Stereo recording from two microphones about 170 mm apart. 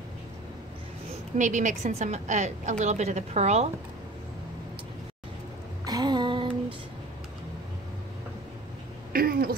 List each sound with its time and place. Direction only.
1.4 s a woman's voice: 45° right (ahead or behind)
5.9 s a sound: 25° right (ahead or behind)
9.1 s throat clearing: 60° right (ahead or behind)